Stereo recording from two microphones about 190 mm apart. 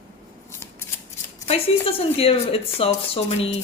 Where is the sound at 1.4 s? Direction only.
30° left (ahead or behind).